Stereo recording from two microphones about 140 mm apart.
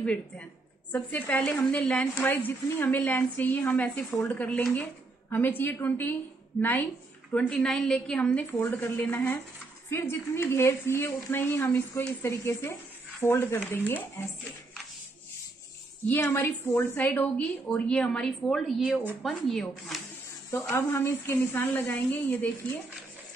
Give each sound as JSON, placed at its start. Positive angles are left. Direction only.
{"t": 0.9, "sound": "a woman's voice", "side_deg": 15}
{"t": 16.1, "sound": "a woman's voice", "side_deg": 15}
{"t": 20.5, "sound": "a woman's voice", "side_deg": 15}